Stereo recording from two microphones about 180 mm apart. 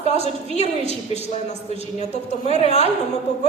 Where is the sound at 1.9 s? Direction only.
40° left (ahead or behind).